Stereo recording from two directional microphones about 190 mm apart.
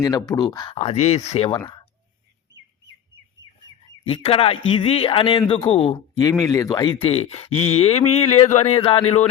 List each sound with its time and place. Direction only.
0.3 s a man's voice: 20° left (ahead or behind)
0.8 s speech: 35° left (ahead or behind)
4.0 s a man's voice: 30° left (ahead or behind)